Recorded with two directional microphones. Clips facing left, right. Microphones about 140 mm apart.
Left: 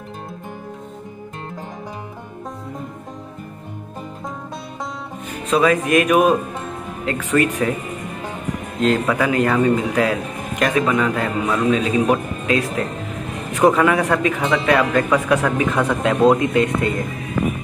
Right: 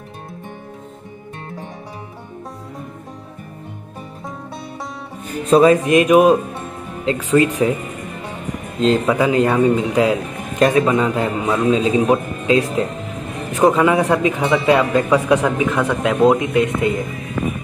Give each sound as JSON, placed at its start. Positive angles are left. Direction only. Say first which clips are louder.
{"t": 5.5, "sound": "a man's voice", "louder": "right 5 dB", "side_deg": -30}
{"t": 8.8, "sound": "a man's voice", "louder": "right 2 dB", "side_deg": -25}
{"t": 15.7, "sound": "a man's voice", "louder": "even", "side_deg": 15}
{"t": 16.0, "sound": "a man's voice", "louder": "right 1 dB", "side_deg": -10}